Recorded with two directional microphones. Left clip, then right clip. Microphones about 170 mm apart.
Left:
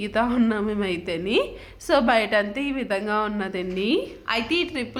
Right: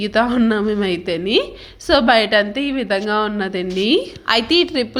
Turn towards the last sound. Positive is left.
turn(degrees=-45)  # may be behind; listen again after turning